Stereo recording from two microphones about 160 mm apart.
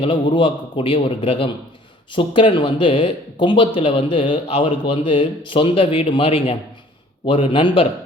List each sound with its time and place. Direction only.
0.0 s a man's voice: 30° left (ahead or behind)